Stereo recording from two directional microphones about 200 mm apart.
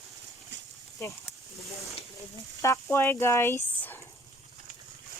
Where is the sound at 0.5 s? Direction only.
60° right (ahead or behind).